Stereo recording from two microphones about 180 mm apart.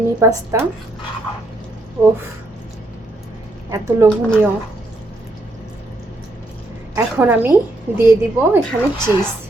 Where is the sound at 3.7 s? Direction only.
15° right (ahead or behind).